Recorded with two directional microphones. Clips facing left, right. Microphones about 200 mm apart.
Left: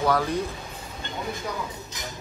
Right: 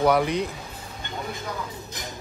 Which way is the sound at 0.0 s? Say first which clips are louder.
Right 3 dB; 20° right (ahead or behind).